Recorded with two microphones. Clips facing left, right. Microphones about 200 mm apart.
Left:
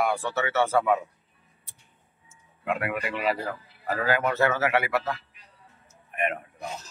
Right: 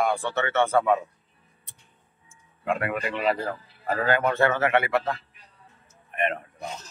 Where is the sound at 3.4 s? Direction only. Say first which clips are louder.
Right 2 dB; 30° right (ahead or behind).